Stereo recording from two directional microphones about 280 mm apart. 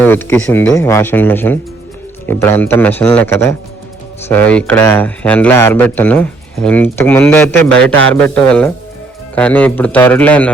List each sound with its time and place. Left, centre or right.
0.0 s a man's voice: centre